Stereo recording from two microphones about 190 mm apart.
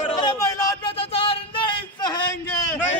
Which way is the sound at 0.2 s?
15° left (ahead or behind).